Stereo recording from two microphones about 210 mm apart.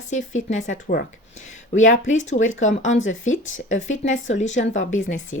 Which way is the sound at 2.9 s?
65° left (ahead or behind).